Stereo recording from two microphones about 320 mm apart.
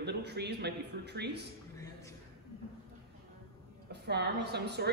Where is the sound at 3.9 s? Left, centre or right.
Right.